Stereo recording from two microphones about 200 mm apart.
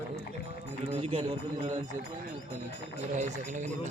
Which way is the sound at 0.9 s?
30° right (ahead or behind).